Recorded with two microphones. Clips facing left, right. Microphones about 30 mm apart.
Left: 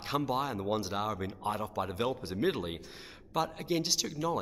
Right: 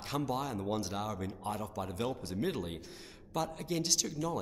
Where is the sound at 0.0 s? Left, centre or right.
Centre.